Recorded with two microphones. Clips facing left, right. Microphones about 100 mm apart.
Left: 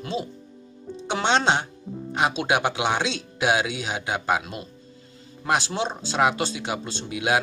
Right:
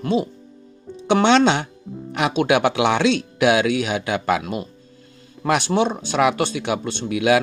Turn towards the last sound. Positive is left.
turn(degrees=-70)  # may be behind; listen again after turning